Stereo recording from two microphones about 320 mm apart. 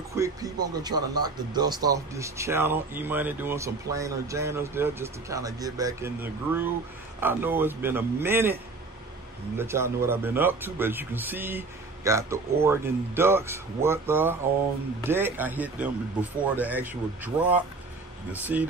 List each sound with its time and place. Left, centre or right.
0.1 s speech: centre
9.6 s speech: centre